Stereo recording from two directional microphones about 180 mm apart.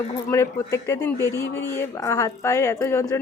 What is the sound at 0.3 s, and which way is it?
A woman's voice, 15° left (ahead or behind).